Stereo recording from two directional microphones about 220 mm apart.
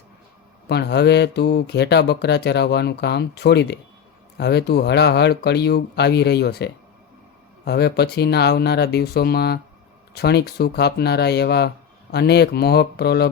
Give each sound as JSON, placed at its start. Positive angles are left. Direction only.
{"t": 0.7, "sound": "speech", "side_deg": 50}